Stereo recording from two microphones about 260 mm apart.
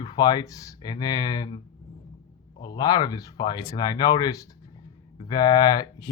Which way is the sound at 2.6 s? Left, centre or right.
Centre.